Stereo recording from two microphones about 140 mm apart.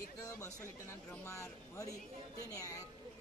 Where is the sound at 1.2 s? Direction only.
20° left (ahead or behind).